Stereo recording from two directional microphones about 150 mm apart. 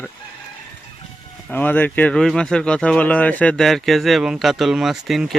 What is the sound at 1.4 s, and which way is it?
A man's voice, 10° left (ahead or behind).